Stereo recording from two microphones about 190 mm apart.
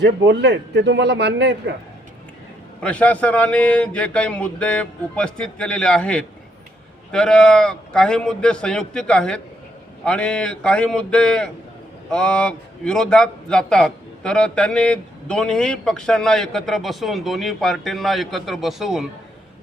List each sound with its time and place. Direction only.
0.0 s a man's voice: 65° right (ahead or behind)
2.8 s a man's voice: 5° left (ahead or behind)